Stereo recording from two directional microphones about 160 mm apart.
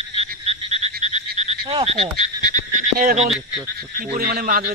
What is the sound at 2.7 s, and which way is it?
Frog, 55° right (ahead or behind).